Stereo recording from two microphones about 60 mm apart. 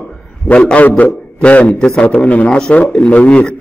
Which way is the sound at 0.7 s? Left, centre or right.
Left.